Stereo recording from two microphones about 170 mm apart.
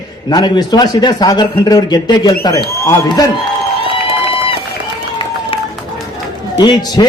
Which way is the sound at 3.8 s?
30° left (ahead or behind).